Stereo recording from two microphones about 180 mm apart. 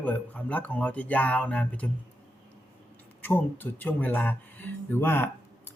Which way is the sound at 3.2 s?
10° left (ahead or behind).